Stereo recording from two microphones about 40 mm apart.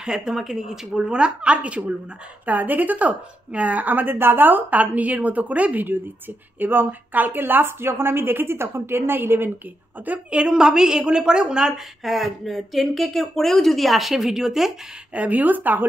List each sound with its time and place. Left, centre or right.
0.0 s a woman's voice: centre
0.9 s speech: right
2.4 s speech: right
6.6 s a woman's voice: right
10.0 s speech: right
10.3 s a woman's voice: right
15.1 s speech: right